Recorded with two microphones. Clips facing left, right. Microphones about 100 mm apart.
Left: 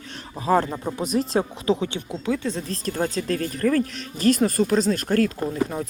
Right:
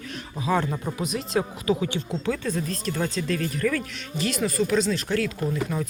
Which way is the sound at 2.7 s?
35° left (ahead or behind).